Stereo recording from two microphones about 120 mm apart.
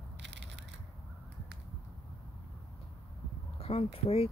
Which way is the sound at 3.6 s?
55° left (ahead or behind).